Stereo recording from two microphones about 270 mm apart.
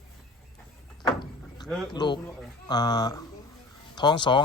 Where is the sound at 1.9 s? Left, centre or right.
Centre.